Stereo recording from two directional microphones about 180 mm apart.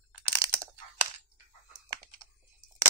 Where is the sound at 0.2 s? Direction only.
20° right (ahead or behind).